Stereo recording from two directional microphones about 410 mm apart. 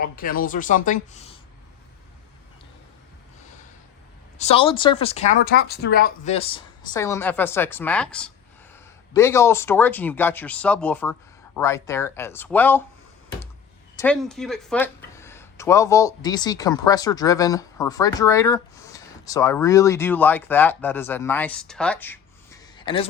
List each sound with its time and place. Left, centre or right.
0.0 s a woman's voice: left
4.4 s speech: centre
13.9 s a man's voice: centre